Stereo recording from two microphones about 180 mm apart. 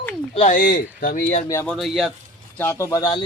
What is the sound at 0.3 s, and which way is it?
Speech, 45° left (ahead or behind).